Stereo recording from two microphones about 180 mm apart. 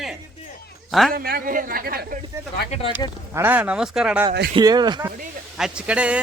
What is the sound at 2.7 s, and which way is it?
Speech, 30° left (ahead or behind).